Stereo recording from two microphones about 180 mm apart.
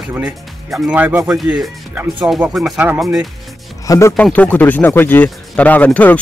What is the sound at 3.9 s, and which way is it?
Speech, 15° left (ahead or behind).